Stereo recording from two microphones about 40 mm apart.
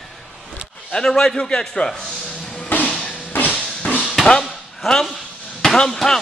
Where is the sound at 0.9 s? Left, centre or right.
Centre.